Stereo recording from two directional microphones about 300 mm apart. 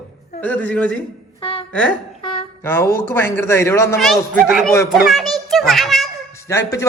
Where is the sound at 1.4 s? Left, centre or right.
Centre.